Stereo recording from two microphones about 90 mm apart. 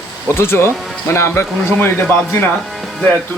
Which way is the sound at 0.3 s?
25° left (ahead or behind).